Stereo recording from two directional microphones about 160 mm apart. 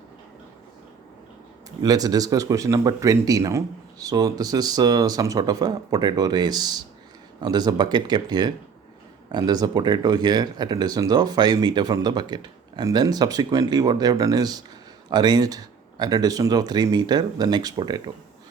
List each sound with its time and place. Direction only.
1.8 s speech: 25° right (ahead or behind)